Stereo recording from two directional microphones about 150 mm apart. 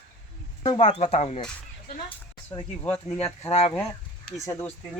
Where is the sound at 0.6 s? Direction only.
35° left (ahead or behind).